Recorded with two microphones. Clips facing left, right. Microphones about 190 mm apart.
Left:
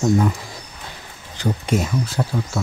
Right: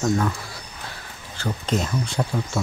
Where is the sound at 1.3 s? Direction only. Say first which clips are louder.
Left 4 dB; 15° left (ahead or behind).